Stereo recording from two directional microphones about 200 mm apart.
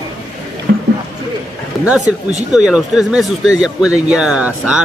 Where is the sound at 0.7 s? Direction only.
55° right (ahead or behind).